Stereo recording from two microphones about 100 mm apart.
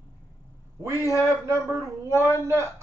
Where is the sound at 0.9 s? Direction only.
35° left (ahead or behind).